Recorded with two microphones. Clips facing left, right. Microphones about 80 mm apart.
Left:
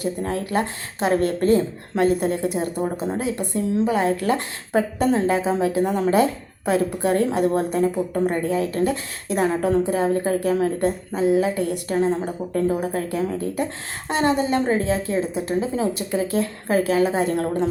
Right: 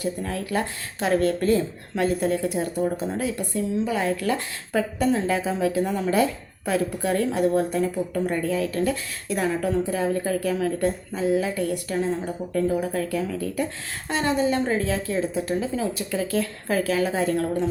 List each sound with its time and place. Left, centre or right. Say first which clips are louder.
0.2 s a woman's voice: left 3 dB; left
2.8 s a woman's voice: left 1 dB; left
9.5 s a woman's voice: left 3 dB; left